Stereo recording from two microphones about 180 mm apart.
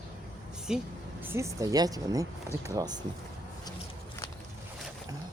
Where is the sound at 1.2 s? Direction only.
15° right (ahead or behind).